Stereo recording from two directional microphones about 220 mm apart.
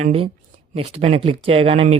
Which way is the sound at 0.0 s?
25° right (ahead or behind).